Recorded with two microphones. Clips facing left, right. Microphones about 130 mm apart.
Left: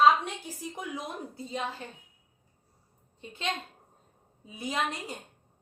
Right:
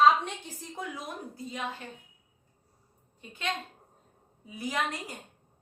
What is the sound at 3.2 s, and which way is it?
A woman's voice, 25° left (ahead or behind).